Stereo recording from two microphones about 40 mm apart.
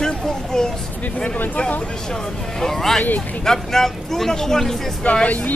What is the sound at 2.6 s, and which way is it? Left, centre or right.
Speech, centre.